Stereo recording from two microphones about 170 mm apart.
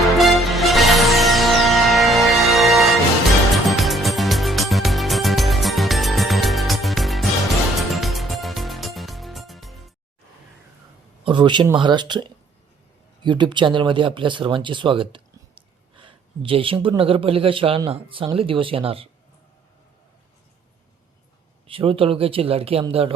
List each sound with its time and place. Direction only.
0.2 s music: centre (ahead or behind)
11.3 s speech: 30° right (ahead or behind)
21.7 s speech: 30° right (ahead or behind)